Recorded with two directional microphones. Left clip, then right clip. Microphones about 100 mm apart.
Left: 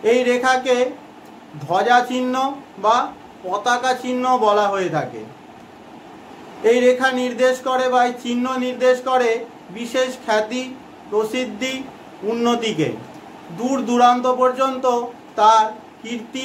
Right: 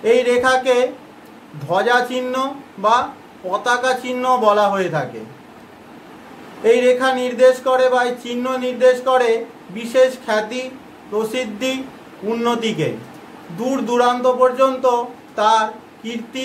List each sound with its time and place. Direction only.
0.0 s speech: 25° left (ahead or behind)
1.7 s speech: 30° left (ahead or behind)
3.5 s speech: 20° left (ahead or behind)
6.6 s speech: 20° left (ahead or behind)
11.3 s speech: 20° left (ahead or behind)